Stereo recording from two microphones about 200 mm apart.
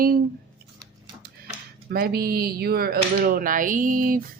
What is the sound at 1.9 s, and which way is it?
Speech, 50° right (ahead or behind).